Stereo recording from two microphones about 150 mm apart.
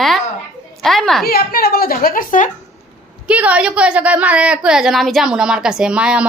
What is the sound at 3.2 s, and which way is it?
A woman's voice, 10° right (ahead or behind).